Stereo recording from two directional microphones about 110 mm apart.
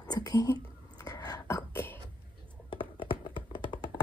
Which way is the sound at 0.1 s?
40° left (ahead or behind).